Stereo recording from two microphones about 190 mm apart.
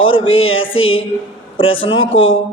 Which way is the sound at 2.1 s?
90° left.